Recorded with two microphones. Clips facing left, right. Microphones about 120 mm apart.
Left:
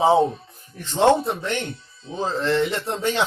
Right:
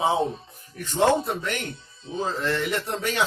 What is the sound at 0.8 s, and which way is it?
A man's voice, 25° left (ahead or behind).